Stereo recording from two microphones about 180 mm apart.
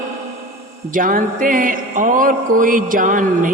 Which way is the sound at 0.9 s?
50° right (ahead or behind).